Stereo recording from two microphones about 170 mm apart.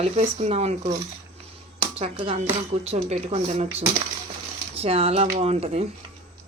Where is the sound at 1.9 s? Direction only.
35° right (ahead or behind).